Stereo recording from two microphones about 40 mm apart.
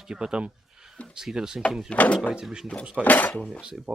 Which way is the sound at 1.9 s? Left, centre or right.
Left.